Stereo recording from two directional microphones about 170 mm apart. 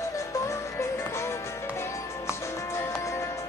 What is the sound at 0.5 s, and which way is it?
Music, 15° left (ahead or behind).